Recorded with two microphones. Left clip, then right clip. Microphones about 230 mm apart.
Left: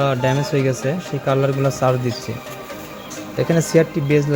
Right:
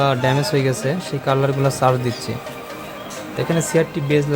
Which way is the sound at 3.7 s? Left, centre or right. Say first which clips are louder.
Left 2 dB; centre.